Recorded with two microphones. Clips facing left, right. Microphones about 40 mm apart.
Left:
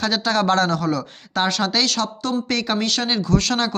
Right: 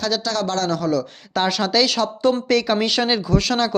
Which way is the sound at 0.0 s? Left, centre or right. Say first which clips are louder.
Left 2 dB; left.